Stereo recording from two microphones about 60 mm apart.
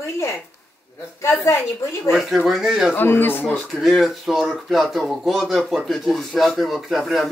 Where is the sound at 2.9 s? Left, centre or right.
Left.